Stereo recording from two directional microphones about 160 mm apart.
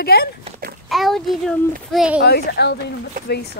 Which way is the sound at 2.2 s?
85° left.